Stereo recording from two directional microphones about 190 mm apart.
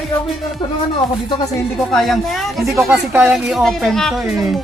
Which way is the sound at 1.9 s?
Centre (ahead or behind).